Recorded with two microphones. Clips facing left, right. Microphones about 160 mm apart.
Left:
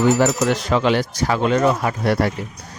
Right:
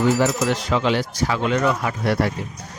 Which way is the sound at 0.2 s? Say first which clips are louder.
Left 2 dB; 55° left (ahead or behind).